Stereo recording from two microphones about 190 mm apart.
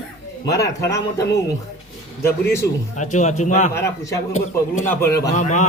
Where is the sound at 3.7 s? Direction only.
15° left (ahead or behind).